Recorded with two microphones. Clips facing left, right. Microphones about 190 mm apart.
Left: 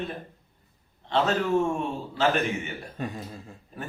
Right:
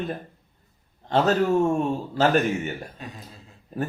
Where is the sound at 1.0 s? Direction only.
40° right (ahead or behind).